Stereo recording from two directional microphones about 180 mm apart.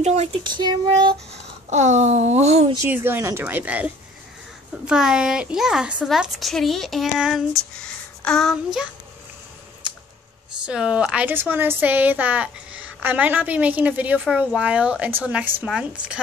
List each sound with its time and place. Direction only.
0.0 s speech: 35° right (ahead or behind)
1.3 s speech: 40° right (ahead or behind)
2.7 s a woman's voice: 15° right (ahead or behind); by 8.5 s 5° left (ahead or behind)
10.6 s a woman's voice: 5° right (ahead or behind)